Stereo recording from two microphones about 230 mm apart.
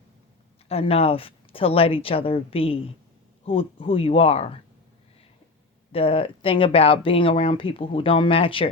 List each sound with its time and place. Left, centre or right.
0.7 s speech: left
5.9 s speech: left